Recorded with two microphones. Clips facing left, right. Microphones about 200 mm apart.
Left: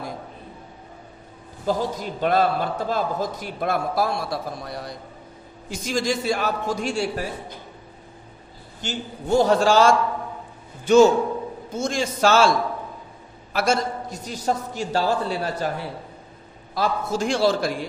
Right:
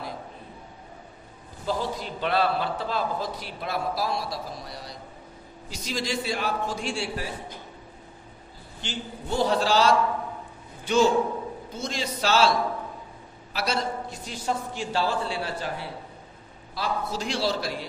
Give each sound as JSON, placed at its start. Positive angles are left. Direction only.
{"t": 1.7, "sound": "a man's voice", "side_deg": 45}
{"t": 8.8, "sound": "a man's voice", "side_deg": 45}
{"t": 16.7, "sound": "a man's voice", "side_deg": 45}